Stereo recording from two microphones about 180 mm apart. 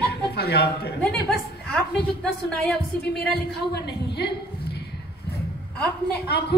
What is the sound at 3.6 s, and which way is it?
A woman's voice, 65° left (ahead or behind).